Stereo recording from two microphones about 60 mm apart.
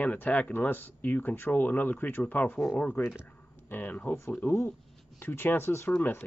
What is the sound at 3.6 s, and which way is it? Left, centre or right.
Speech, left.